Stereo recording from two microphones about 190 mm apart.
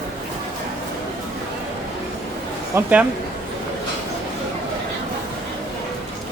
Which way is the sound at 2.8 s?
10° right (ahead or behind).